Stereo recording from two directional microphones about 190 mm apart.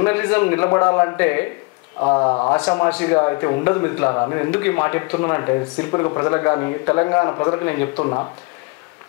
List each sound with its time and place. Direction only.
0.0 s a man's voice: 10° left (ahead or behind)
2.6 s a man's voice: 10° left (ahead or behind)